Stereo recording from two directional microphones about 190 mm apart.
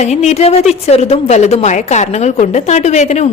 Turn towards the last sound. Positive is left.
turn(degrees=35)  # may be behind; listen again after turning